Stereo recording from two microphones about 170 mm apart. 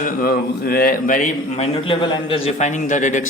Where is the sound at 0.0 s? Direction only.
60° left (ahead or behind).